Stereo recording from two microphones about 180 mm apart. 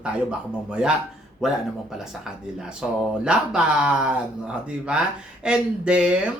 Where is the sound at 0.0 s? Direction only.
5° right (ahead or behind).